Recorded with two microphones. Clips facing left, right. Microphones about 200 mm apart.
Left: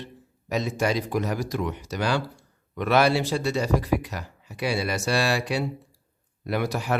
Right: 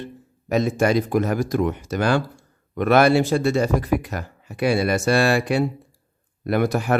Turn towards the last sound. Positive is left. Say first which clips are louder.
# right 6 dB
turn(degrees=-50)  # may be behind; listen again after turning